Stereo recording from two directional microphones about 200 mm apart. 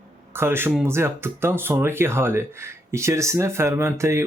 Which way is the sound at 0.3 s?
10° right (ahead or behind).